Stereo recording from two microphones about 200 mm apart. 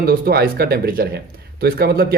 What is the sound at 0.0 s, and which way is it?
Speech, 50° right (ahead or behind).